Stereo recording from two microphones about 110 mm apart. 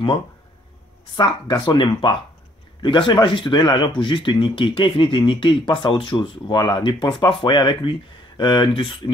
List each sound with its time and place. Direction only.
1.1 s speech: 45° left (ahead or behind)